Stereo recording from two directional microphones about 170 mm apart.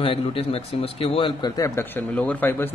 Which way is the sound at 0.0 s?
30° left (ahead or behind).